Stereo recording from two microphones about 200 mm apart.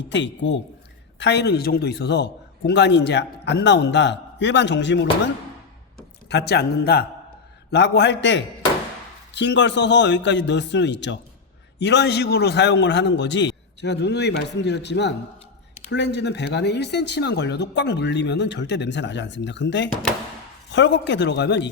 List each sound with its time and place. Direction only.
0.1 s a man's voice: 65° left (ahead or behind)